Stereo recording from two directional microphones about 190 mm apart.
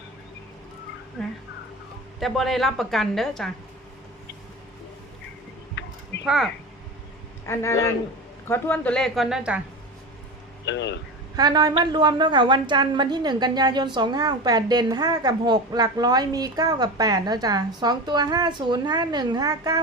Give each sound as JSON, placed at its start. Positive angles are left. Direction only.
{"t": 2.1, "sound": "a woman's voice", "side_deg": 0}
{"t": 5.8, "sound": "a sound", "side_deg": 65}
{"t": 6.2, "sound": "a woman's voice", "side_deg": -5}
{"t": 7.4, "sound": "a man's voice", "side_deg": 15}
{"t": 10.7, "sound": "speech", "side_deg": 70}
{"t": 11.3, "sound": "a woman's voice", "side_deg": -20}